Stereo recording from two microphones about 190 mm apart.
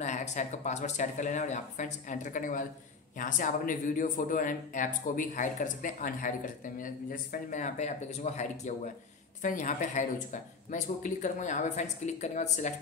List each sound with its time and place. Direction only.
0.0 s speech: 40° left (ahead or behind)